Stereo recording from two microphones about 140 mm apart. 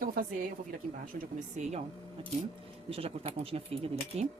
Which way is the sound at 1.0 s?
70° right (ahead or behind).